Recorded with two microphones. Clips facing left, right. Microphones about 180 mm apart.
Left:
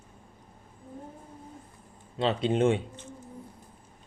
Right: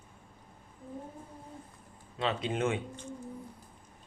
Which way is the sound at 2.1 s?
30° left (ahead or behind).